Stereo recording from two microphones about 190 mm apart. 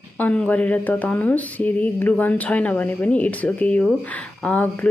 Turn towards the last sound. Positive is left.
turn(degrees=10)  # may be behind; listen again after turning